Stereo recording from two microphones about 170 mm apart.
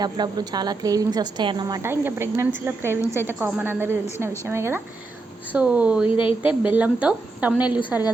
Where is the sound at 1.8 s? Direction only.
15° right (ahead or behind).